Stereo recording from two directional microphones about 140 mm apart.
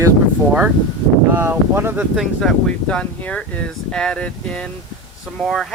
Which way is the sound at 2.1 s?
Centre (ahead or behind).